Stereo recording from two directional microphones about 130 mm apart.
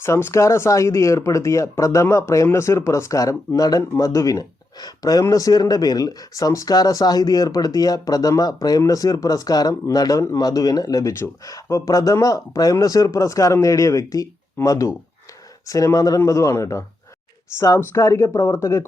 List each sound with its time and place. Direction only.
0.0 s speech: 20° left (ahead or behind)